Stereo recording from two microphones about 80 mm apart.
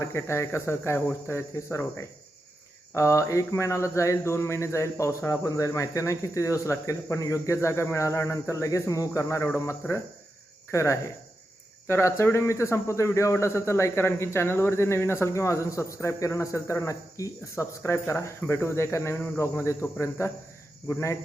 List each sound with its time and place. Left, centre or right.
0.0 s speech: left